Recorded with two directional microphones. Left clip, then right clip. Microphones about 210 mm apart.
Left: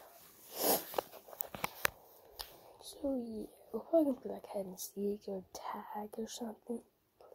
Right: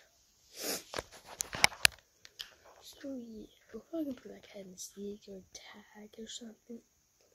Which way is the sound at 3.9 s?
5° right (ahead or behind).